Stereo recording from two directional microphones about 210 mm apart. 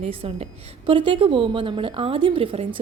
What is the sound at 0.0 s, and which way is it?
A woman's voice, 30° right (ahead or behind).